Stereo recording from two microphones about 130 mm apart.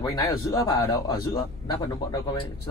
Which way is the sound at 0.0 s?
25° left (ahead or behind).